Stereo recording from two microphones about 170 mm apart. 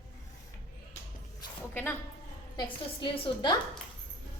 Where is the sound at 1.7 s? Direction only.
10° left (ahead or behind).